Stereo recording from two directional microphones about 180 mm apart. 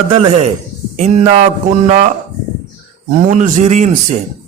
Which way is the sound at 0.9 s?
40° right (ahead or behind).